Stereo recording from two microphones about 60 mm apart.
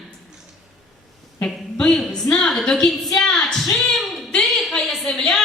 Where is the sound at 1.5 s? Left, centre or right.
Centre.